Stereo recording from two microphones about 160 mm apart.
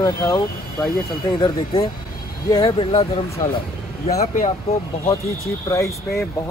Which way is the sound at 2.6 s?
40° left (ahead or behind).